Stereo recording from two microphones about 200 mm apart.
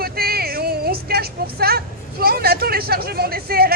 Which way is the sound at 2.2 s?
50° right (ahead or behind).